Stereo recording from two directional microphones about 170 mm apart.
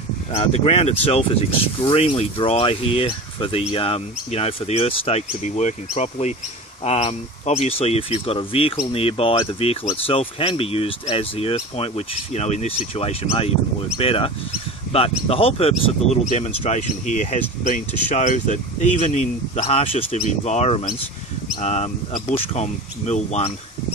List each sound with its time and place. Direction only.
0.3 s speech: 35° left (ahead or behind)